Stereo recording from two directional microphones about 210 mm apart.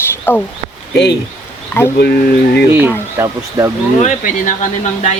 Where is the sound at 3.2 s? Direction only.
10° right (ahead or behind).